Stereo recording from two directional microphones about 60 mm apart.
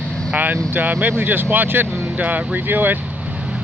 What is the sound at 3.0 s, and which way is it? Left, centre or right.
Vehicle, centre.